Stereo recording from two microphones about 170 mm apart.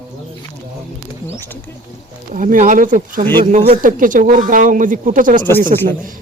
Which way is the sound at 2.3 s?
50° right (ahead or behind).